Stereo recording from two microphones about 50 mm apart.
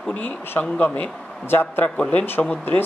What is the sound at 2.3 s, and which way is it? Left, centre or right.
Speech, left.